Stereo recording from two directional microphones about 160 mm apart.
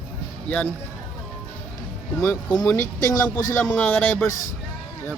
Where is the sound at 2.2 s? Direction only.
10° left (ahead or behind).